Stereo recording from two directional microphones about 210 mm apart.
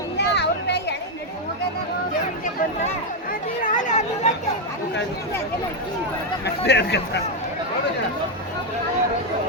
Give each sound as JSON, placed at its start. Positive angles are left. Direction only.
{"t": 0.2, "sound": "a sound", "side_deg": 55}
{"t": 3.6, "sound": "chatter", "side_deg": 35}
{"t": 6.4, "sound": "speech", "side_deg": 55}